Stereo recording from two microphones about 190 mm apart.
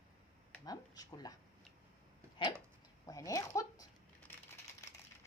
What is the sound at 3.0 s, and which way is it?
Speech, 20° left (ahead or behind).